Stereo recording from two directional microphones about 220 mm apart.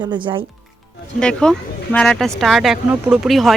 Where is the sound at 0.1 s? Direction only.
20° right (ahead or behind).